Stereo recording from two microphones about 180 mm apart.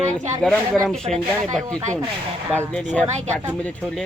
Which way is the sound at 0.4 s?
Centre (ahead or behind).